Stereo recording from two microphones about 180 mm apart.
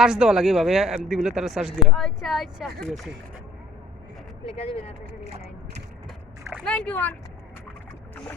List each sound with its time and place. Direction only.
0.0 s speech: 5° right (ahead or behind)
4.4 s speech: 30° left (ahead or behind)
6.7 s speech: 5° left (ahead or behind)
8.1 s boat: 10° left (ahead or behind)